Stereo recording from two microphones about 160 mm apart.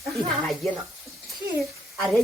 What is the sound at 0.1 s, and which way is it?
Speech, centre (ahead or behind).